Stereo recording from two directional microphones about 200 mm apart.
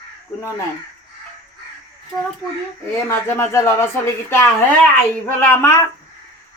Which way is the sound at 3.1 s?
15° left (ahead or behind).